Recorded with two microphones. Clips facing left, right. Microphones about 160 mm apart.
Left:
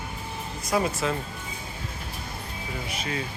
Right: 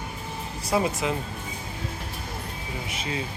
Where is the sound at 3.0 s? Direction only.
20° right (ahead or behind).